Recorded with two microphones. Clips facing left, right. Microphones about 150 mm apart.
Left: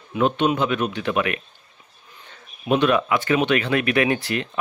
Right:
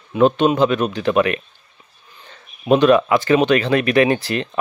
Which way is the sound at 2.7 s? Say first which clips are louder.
Right 6 dB; 40° right (ahead or behind).